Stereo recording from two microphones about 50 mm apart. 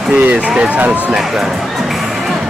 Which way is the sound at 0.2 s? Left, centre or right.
Right.